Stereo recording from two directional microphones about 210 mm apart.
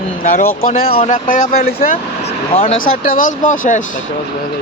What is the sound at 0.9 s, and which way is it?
Speech, 35° left (ahead or behind).